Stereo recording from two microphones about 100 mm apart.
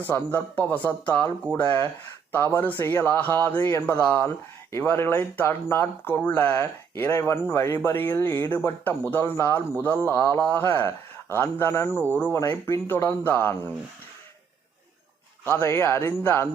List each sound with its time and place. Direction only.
0.0 s speech: 15° left (ahead or behind)
2.3 s speech: 20° left (ahead or behind)
12.4 s speech: 30° left (ahead or behind)
15.6 s speech: 25° left (ahead or behind)